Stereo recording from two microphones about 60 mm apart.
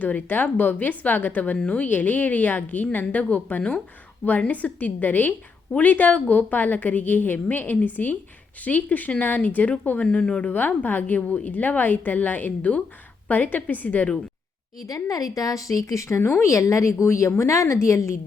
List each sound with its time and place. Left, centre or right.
0.0 s a woman's voice: left
14.8 s a woman's voice: left